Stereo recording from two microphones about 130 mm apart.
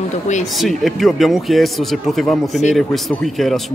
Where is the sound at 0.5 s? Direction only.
Centre (ahead or behind).